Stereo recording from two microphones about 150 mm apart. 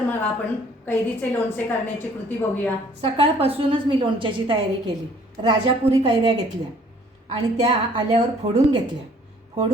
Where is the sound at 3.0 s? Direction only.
40° right (ahead or behind).